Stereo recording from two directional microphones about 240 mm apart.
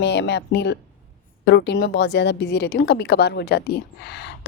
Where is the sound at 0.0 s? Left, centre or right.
Left.